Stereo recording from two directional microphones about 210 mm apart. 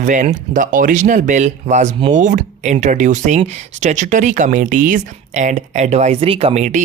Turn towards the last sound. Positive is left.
turn(degrees=-35)  # may be behind; listen again after turning